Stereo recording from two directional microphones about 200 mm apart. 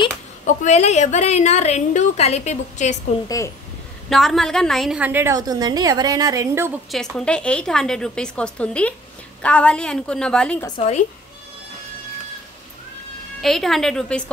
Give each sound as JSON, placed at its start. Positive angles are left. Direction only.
{"t": 0.6, "sound": "a woman's voice", "side_deg": 35}
{"t": 3.3, "sound": "a woman's voice", "side_deg": 15}
{"t": 4.1, "sound": "a woman's voice", "side_deg": 0}
{"t": 6.9, "sound": "a woman's voice", "side_deg": 0}
{"t": 13.4, "sound": "a woman's voice", "side_deg": 0}